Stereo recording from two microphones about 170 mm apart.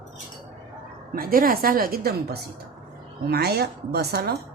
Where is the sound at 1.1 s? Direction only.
60° right (ahead or behind).